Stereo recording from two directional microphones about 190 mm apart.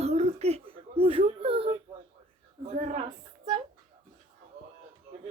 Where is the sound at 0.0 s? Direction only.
35° right (ahead or behind).